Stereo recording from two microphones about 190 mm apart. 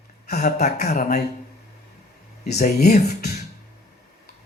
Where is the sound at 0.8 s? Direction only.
50° left (ahead or behind).